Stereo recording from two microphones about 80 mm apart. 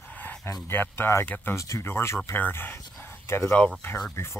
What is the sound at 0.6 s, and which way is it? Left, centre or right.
Speech, left.